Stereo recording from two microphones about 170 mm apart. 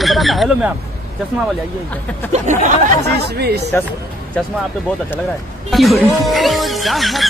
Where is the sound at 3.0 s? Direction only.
75° right (ahead or behind).